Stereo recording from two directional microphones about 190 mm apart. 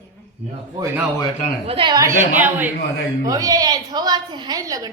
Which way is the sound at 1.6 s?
30° right (ahead or behind).